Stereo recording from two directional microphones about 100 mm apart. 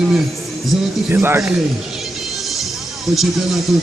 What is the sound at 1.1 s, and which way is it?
Speech, 20° right (ahead or behind).